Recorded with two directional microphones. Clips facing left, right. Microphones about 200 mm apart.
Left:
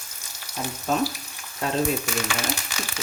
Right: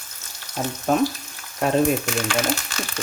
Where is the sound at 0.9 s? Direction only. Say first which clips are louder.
Right 4 dB; 55° right (ahead or behind).